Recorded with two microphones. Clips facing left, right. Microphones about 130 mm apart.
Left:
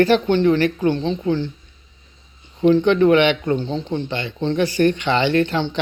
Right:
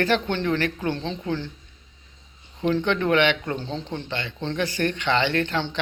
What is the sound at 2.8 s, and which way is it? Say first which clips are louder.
Speech: left 4 dB; 15° left (ahead or behind).